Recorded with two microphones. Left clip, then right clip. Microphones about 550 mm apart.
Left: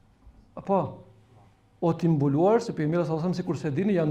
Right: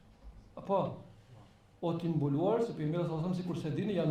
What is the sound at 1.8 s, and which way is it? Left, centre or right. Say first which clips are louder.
Speech: left 9 dB; left.